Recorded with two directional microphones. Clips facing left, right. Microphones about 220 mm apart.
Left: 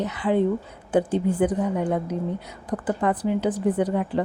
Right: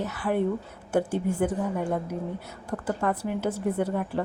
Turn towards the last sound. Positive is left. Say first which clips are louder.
# left 4 dB
turn(degrees=15)  # may be behind; listen again after turning